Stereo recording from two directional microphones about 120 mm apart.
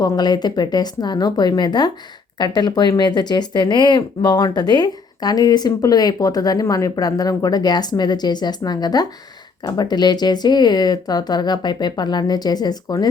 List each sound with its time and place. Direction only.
0.0 s speech: 35° left (ahead or behind)